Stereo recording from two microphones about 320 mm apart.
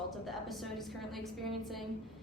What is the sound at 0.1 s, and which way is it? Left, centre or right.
A woman's voice, centre.